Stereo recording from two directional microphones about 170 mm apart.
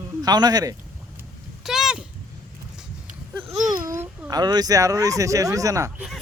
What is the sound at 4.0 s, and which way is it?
Speech, 20° right (ahead or behind).